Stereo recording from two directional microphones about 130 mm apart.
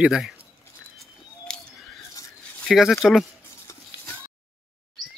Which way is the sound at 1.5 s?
5° left (ahead or behind).